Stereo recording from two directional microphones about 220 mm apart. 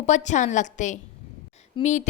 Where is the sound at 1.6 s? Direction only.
30° left (ahead or behind).